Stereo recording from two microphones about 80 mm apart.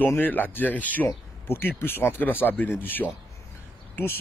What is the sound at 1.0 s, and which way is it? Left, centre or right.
Speech, left.